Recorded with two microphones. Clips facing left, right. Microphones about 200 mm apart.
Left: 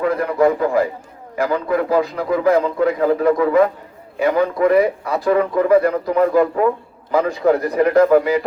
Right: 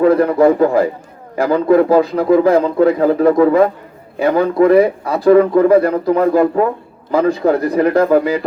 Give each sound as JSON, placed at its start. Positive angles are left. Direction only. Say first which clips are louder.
{"t": 0.0, "sound": "a man's voice", "louder": "right 6 dB", "side_deg": -30}